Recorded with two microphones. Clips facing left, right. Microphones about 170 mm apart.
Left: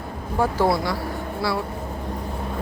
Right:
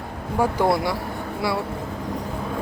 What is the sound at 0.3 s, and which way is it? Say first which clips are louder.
Speech: even; 15° right (ahead or behind).